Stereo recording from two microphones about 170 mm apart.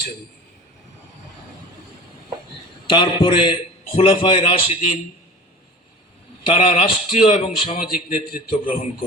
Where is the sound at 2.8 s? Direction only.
30° left (ahead or behind).